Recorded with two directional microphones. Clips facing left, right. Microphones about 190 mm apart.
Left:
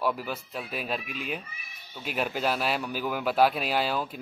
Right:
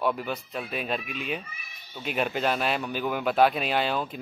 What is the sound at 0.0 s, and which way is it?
Speech, 5° left (ahead or behind).